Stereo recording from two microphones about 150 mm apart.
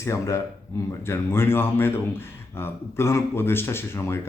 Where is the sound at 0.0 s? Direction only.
20° left (ahead or behind).